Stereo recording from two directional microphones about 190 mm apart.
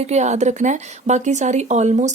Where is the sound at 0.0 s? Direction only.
35° right (ahead or behind).